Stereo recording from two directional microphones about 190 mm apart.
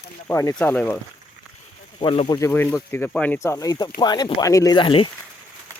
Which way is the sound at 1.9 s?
30° left (ahead or behind).